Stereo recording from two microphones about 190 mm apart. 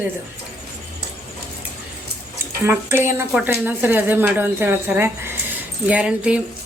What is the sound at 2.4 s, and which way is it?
Speech, 10° right (ahead or behind).